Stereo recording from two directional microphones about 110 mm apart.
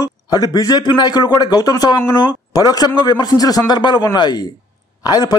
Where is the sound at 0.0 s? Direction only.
35° left (ahead or behind).